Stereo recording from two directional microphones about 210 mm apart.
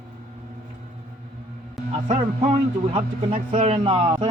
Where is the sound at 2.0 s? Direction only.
30° right (ahead or behind).